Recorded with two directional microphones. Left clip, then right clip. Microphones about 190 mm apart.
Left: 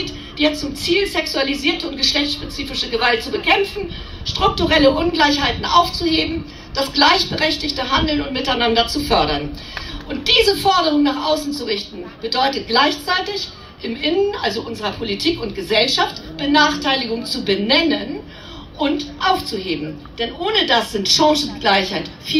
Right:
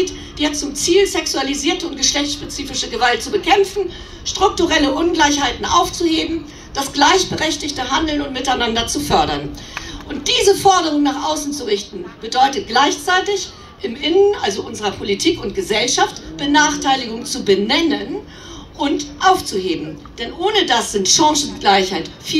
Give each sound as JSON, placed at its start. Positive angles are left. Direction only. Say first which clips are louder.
{"t": 0.4, "sound": "a woman's voice", "louder": "left 1 dB", "side_deg": -40}